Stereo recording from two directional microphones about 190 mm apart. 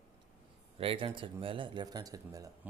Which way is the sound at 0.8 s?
30° right (ahead or behind).